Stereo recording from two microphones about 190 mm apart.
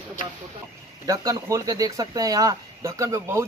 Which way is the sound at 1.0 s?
15° right (ahead or behind).